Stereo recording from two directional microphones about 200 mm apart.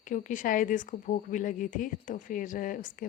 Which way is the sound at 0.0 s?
40° left (ahead or behind).